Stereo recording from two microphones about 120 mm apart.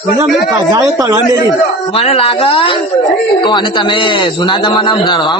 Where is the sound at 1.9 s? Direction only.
55° left (ahead or behind).